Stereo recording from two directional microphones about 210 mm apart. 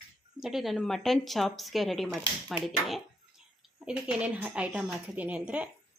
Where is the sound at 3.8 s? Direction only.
5° right (ahead or behind).